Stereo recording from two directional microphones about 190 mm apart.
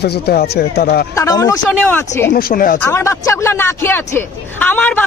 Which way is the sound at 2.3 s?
50° left (ahead or behind).